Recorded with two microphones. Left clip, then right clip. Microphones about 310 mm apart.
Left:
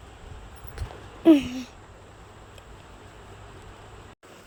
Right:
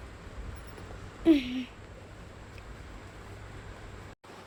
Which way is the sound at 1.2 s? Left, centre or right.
Centre.